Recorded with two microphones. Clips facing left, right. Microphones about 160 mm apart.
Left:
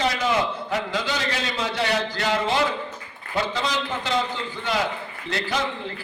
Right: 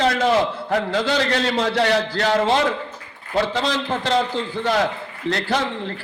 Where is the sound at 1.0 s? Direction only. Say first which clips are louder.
Right 7 dB; 65° right (ahead or behind).